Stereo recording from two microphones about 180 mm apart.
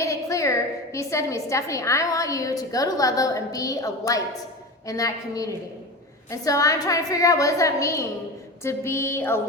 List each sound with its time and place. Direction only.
0.0 s a woman's voice: 15° left (ahead or behind)